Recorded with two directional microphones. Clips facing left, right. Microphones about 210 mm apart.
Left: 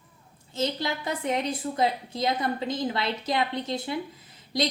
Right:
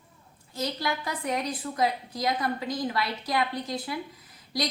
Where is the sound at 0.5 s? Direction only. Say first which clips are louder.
Left 2 dB; 25° left (ahead or behind).